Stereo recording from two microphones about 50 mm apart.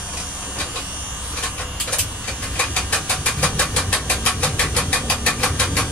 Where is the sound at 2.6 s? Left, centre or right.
Left.